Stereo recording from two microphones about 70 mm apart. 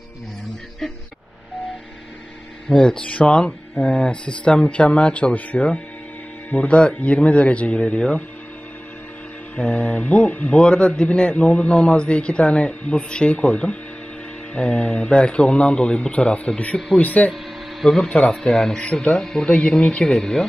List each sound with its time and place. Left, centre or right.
2.7 s a man's voice: centre
9.6 s a man's voice: centre
17.3 s a man's voice: centre